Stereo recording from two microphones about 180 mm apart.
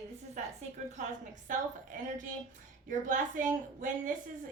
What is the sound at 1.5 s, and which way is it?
Speech, 45° right (ahead or behind).